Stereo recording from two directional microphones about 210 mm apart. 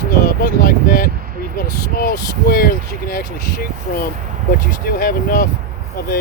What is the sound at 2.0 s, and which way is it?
Speech, 45° left (ahead or behind).